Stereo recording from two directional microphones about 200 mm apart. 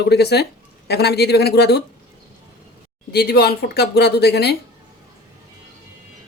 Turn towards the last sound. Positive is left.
turn(degrees=55)  # may be behind; listen again after turning